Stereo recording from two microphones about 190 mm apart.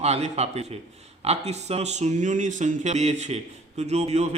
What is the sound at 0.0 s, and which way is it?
Speech, 35° right (ahead or behind).